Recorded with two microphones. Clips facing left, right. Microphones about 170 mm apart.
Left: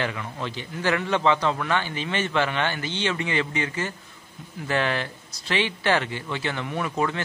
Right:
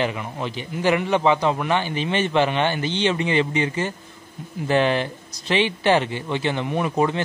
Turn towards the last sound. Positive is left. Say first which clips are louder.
# right 5 dB
turn(degrees=-20)  # may be behind; listen again after turning